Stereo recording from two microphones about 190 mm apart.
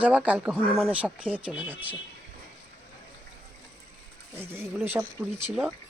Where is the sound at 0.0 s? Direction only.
5° right (ahead or behind).